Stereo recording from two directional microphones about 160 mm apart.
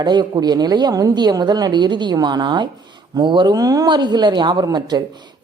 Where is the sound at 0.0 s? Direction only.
25° right (ahead or behind).